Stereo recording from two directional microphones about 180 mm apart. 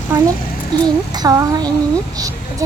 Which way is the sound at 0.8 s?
20° right (ahead or behind).